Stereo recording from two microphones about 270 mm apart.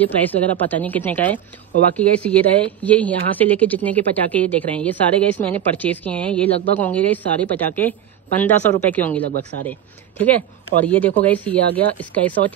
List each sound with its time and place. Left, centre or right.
0.0 s a woman's voice: centre
9.2 s speech: right
9.7 s a woman's voice: centre